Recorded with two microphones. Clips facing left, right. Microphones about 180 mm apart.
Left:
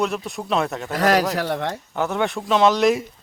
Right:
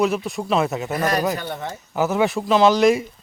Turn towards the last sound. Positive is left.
turn(degrees=0)  # may be behind; listen again after turning